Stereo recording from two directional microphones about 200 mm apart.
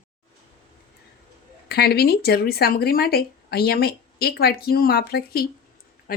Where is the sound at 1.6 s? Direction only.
50° left (ahead or behind).